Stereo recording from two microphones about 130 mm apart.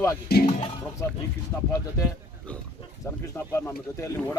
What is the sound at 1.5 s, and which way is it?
Speech, 20° left (ahead or behind).